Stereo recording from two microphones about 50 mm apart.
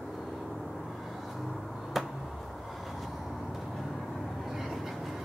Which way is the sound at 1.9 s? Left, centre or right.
Centre.